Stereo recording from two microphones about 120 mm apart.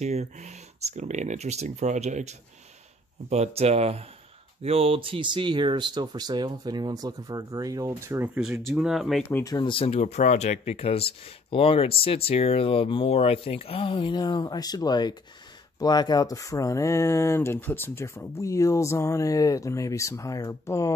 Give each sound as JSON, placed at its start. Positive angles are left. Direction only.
{"t": 0.0, "sound": "speech", "side_deg": -70}
{"t": 3.3, "sound": "speech", "side_deg": -60}
{"t": 8.7, "sound": "speech", "side_deg": -5}
{"t": 9.4, "sound": "speech", "side_deg": 30}
{"t": 9.7, "sound": "speech", "side_deg": 50}
{"t": 9.9, "sound": "speech", "side_deg": 70}